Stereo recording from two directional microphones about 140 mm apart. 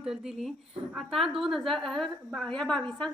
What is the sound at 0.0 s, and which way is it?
A woman's voice, 5° right (ahead or behind).